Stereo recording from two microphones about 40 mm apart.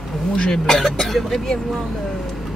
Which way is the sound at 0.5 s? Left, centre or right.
Centre.